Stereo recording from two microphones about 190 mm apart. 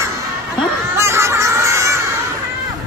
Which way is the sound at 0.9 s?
15° right (ahead or behind).